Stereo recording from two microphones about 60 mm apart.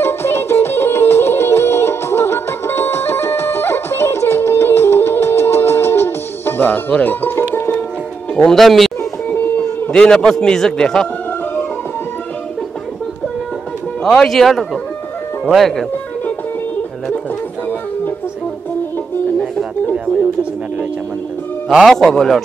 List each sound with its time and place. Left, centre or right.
0.0 s music: left
8.4 s speech: centre
9.9 s a man's voice: centre
14.0 s speech: centre
21.8 s a man's voice: centre